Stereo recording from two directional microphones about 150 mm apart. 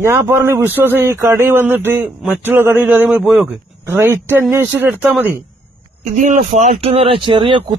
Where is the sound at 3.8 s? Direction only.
15° right (ahead or behind).